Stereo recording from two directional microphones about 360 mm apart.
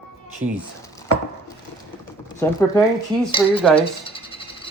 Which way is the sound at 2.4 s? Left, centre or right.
Centre.